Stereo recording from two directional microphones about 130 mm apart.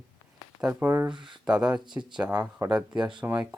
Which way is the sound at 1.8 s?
35° right (ahead or behind).